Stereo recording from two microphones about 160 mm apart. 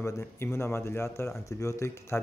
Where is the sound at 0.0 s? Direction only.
15° left (ahead or behind).